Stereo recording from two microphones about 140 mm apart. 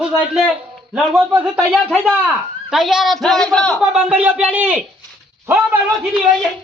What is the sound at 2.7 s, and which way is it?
Speech, centre (ahead or behind).